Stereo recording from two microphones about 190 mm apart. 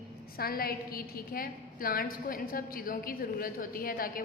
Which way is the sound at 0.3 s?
55° left (ahead or behind).